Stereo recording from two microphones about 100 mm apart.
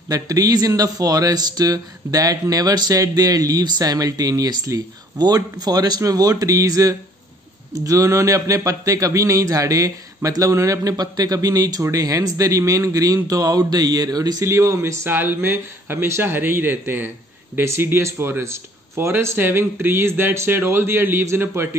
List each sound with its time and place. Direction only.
0.1 s speech: 35° right (ahead or behind)